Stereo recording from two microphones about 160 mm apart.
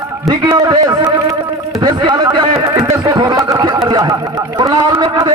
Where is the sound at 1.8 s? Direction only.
25° right (ahead or behind).